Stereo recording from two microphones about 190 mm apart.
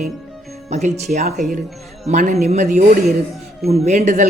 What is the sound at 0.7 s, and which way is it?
A man's voice, 35° right (ahead or behind).